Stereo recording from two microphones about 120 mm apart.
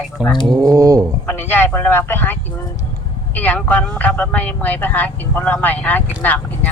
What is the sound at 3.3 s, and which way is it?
Speech, 15° left (ahead or behind).